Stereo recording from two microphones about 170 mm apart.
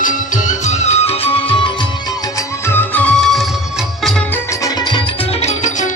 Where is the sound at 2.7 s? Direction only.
10° left (ahead or behind).